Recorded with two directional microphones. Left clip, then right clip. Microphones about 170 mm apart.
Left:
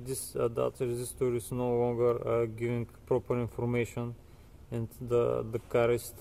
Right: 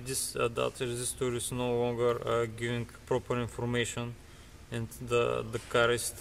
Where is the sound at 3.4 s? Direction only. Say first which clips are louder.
Left 1 dB; 15° left (ahead or behind).